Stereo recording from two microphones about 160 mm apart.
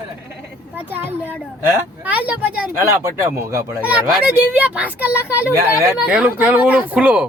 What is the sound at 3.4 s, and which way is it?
Speech, 20° right (ahead or behind).